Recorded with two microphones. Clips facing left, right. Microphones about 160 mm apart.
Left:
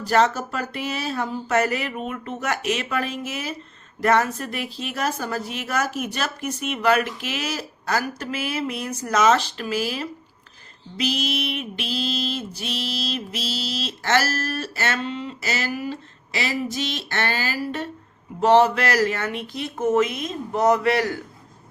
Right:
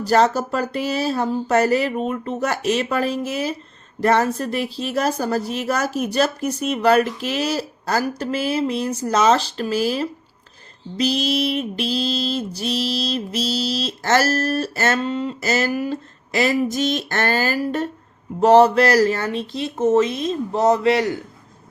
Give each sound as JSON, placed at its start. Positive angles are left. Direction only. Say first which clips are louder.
{"t": 0.0, "sound": "mantra", "louder": "right 3 dB", "side_deg": -35}
{"t": 18.3, "sound": "speech", "louder": "right 4 dB", "side_deg": -40}